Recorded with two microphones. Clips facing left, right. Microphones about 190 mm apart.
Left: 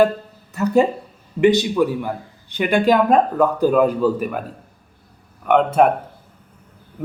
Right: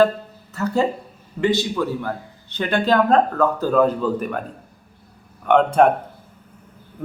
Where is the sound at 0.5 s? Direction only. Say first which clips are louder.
Left 4 dB; 15° left (ahead or behind).